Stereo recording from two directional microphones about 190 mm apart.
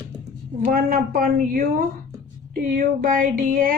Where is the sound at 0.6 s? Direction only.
45° right (ahead or behind).